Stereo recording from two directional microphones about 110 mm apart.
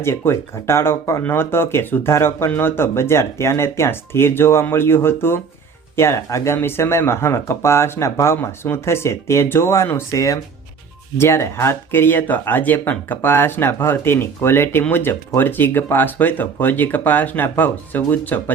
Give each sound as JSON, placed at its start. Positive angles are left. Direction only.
{"t": 0.0, "sound": "speech", "side_deg": 25}